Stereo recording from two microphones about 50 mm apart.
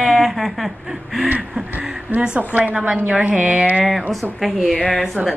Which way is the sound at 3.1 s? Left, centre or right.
Right.